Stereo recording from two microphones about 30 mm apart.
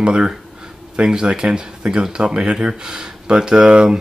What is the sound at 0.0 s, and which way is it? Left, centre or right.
Speech, right.